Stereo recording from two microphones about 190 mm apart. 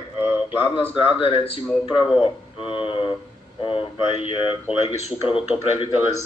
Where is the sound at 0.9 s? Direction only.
30° left (ahead or behind).